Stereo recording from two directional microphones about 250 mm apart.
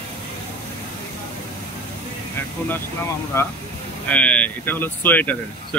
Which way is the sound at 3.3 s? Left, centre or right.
Centre.